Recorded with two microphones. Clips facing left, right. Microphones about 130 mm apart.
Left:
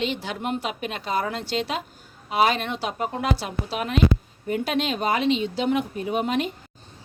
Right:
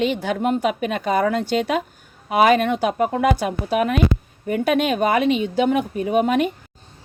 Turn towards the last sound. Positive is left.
turn(degrees=-50)  # may be behind; listen again after turning